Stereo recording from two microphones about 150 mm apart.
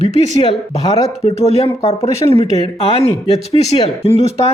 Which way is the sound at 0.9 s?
45° left (ahead or behind).